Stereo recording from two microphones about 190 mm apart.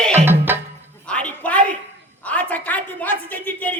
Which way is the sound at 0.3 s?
10° right (ahead or behind).